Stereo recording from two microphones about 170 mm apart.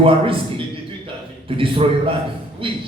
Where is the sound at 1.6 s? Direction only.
35° right (ahead or behind).